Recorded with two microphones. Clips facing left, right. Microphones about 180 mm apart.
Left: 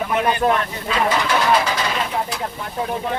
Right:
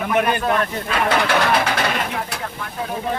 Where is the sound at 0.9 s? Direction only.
60° right (ahead or behind).